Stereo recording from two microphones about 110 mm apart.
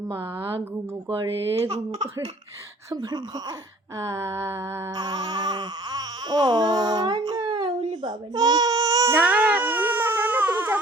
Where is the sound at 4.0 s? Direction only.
25° right (ahead or behind).